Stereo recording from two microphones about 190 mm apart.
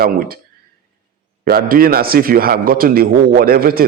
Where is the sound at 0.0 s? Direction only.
50° right (ahead or behind).